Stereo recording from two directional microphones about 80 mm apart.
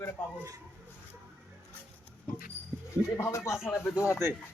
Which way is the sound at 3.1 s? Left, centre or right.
Left.